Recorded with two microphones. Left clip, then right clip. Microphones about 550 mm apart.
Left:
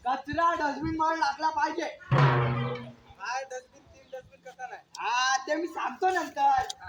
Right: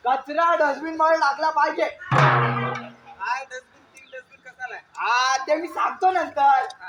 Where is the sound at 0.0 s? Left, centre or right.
Left.